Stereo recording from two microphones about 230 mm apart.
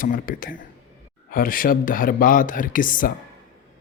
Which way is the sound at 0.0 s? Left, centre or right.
Left.